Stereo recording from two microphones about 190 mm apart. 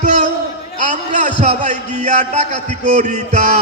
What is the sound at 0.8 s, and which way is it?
A man's voice, 40° right (ahead or behind).